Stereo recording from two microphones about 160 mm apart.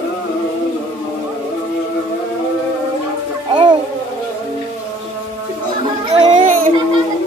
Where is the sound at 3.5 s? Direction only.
30° right (ahead or behind).